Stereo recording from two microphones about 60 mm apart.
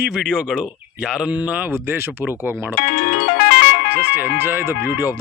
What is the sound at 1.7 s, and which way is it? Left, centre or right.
Speech, right.